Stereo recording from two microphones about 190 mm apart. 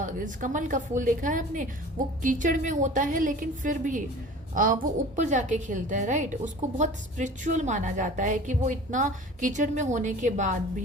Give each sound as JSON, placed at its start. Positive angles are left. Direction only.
{"t": 0.0, "sound": "a woman's voice", "side_deg": -40}